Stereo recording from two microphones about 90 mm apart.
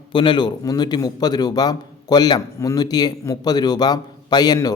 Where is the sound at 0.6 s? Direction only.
50° left (ahead or behind).